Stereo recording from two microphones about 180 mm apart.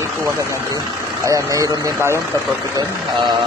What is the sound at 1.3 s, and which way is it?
Speech, 15° right (ahead or behind).